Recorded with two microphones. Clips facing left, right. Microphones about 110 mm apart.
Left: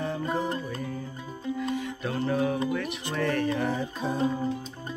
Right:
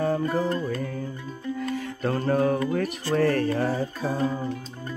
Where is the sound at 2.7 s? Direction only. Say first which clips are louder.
Right 5 dB; 40° right (ahead or behind).